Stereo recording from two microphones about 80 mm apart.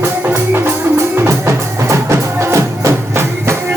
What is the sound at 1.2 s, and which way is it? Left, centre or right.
Music, right.